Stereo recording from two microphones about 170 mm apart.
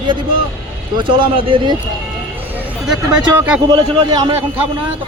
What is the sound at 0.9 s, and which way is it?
Speech, 30° right (ahead or behind).